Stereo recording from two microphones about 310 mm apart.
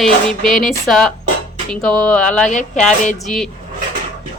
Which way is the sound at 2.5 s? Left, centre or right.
Left.